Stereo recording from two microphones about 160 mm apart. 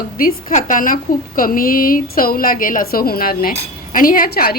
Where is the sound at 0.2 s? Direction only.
60° left (ahead or behind).